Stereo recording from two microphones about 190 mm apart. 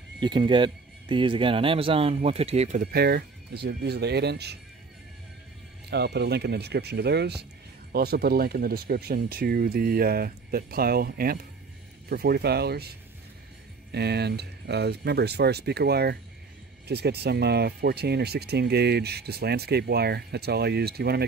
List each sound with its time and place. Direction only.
0.2 s speech: 25° right (ahead or behind)
2.8 s speech: 55° right (ahead or behind)
5.9 s speech: 60° right (ahead or behind)
13.9 s speech: 60° right (ahead or behind)